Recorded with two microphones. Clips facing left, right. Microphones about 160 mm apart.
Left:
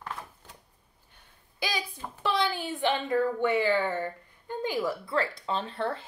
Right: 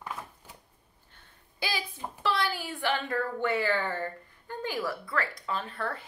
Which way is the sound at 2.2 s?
20° left (ahead or behind).